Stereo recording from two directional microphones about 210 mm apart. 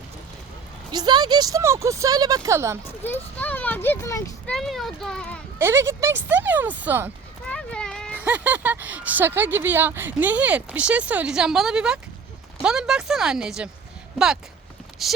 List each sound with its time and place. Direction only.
0.9 s speech: 20° right (ahead or behind)
3.0 s speech: 10° left (ahead or behind)
4.5 s speech: centre (ahead or behind)
5.5 s speech: 10° right (ahead or behind)
7.4 s clip-clop: 5° left (ahead or behind)
8.1 s speech: 10° right (ahead or behind)
15.0 s speech: centre (ahead or behind)